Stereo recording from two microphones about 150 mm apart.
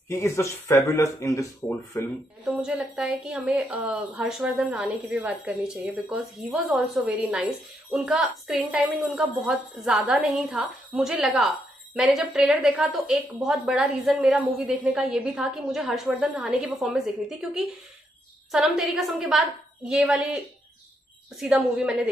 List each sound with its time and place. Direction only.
0.1 s speech: 20° left (ahead or behind)
2.4 s a woman's voice: 5° right (ahead or behind)
21.4 s a woman's voice: 5° right (ahead or behind)